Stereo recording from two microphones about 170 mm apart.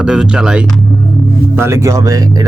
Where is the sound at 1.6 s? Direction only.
15° right (ahead or behind).